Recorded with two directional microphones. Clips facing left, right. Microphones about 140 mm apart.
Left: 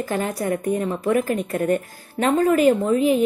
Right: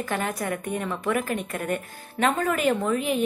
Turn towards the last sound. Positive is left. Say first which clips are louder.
# left 7 dB
turn(degrees=35)  # may be behind; listen again after turning